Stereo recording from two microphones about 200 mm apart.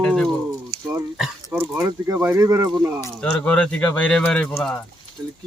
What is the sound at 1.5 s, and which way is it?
Speech, 10° right (ahead or behind).